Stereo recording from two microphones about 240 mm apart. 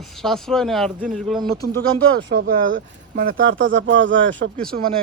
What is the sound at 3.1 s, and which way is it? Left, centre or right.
Speech, right.